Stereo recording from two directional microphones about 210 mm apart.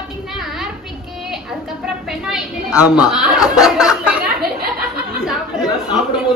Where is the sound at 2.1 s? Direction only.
Centre (ahead or behind).